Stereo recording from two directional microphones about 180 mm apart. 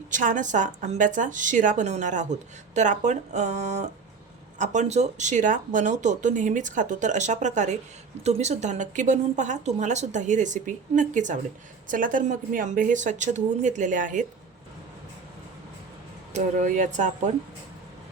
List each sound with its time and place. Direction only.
0.1 s a woman's voice: 45° right (ahead or behind)
16.3 s a woman's voice: 45° right (ahead or behind)